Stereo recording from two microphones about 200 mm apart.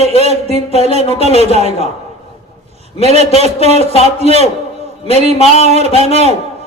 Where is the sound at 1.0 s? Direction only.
30° left (ahead or behind).